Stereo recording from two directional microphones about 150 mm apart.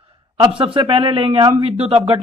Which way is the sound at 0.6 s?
35° right (ahead or behind).